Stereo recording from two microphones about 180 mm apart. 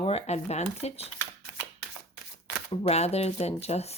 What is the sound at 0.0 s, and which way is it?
Speech, 35° left (ahead or behind).